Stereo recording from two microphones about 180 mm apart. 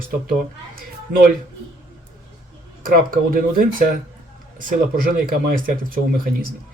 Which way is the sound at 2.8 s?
50° right (ahead or behind).